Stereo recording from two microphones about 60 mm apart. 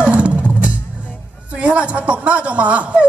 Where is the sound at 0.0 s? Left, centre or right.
Right.